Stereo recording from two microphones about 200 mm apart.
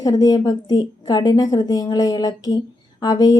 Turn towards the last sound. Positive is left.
turn(degrees=20)  # may be behind; listen again after turning